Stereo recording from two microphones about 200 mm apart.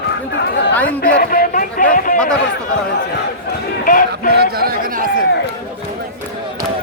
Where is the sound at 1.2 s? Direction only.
45° left (ahead or behind).